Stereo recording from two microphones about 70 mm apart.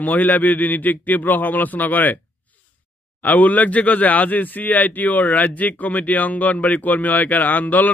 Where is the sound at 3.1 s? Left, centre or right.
Left.